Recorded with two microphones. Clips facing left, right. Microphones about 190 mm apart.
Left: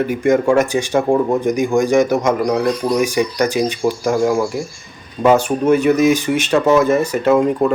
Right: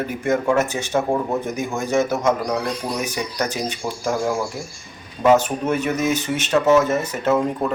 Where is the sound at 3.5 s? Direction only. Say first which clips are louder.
Left 8 dB; 10° left (ahead or behind).